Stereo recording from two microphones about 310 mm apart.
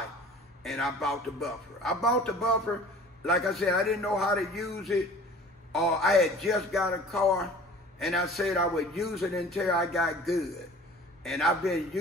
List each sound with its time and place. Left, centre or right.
0.7 s a man's voice: centre